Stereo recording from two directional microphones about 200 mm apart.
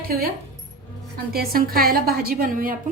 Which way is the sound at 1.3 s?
50° right (ahead or behind).